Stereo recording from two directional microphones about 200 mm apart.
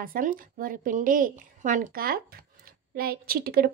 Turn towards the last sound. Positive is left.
turn(degrees=-50)  # may be behind; listen again after turning